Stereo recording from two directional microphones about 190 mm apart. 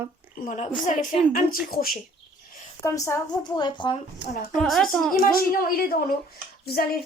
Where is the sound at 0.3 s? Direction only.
40° left (ahead or behind).